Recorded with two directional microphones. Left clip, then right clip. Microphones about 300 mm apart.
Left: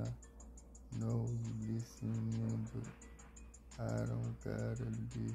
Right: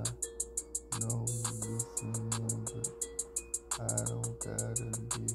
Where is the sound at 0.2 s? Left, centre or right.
Right.